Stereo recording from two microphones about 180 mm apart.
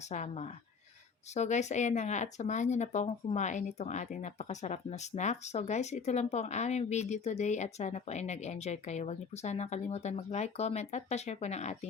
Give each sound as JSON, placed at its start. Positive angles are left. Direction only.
{"t": 0.1, "sound": "speech", "side_deg": 40}